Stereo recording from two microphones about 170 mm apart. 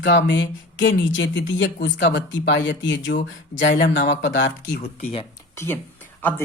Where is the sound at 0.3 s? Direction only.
90° left.